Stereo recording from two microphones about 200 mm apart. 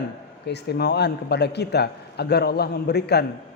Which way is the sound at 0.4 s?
55° left (ahead or behind).